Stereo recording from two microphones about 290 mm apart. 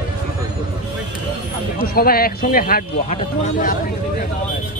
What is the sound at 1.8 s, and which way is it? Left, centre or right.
Speech, left.